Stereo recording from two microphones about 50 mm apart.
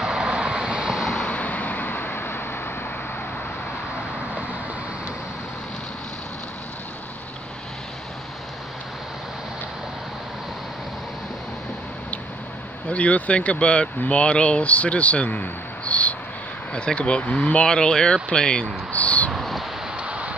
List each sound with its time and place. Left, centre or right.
0.0 s vehicle: centre
1.2 s vehicle: left
12.9 s speech: left
17.6 s speech: centre
18.9 s a sound: left
19.3 s a sound: centre
20.0 s vehicle: right